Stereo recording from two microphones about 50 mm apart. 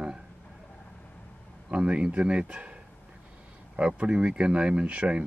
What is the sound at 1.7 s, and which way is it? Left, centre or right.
Speech, right.